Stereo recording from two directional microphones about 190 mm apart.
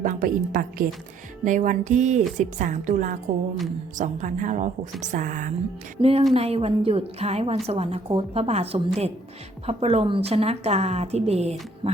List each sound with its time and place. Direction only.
0.0 s a woman's voice: 45° right (ahead or behind)
6.0 s a woman's voice: 30° right (ahead or behind)